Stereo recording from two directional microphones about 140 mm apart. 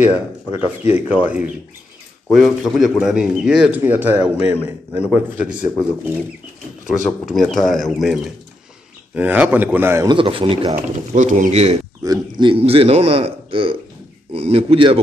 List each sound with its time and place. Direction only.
0.9 s a man's voice: 10° right (ahead or behind)
7.2 s speech: centre (ahead or behind)
9.1 s a man's voice: 10° right (ahead or behind)
10.0 s speech: 35° right (ahead or behind)
11.1 s speech: 65° right (ahead or behind)
12.0 s a man's voice: 30° right (ahead or behind)